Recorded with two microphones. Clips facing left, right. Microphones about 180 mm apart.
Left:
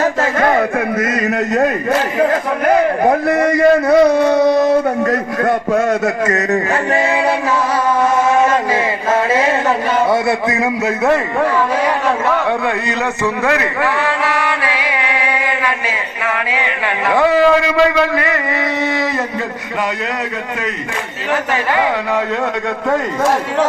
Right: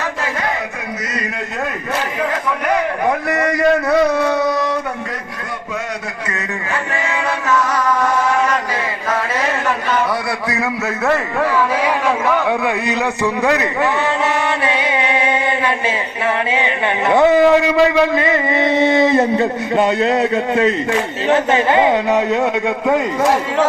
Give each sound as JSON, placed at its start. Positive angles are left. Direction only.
{"t": 0.0, "sound": "a sound", "side_deg": 45}
{"t": 1.1, "sound": "a man's voice", "side_deg": 50}
{"t": 4.4, "sound": "a sound", "side_deg": 25}
{"t": 5.0, "sound": "a man's voice", "side_deg": 50}
{"t": 6.2, "sound": "chant", "side_deg": 40}
{"t": 11.8, "sound": "a man's voice", "side_deg": -10}
{"t": 14.3, "sound": "chant", "side_deg": -25}
{"t": 17.1, "sound": "a man's voice", "side_deg": -20}
{"t": 21.2, "sound": "a man's voice", "side_deg": -25}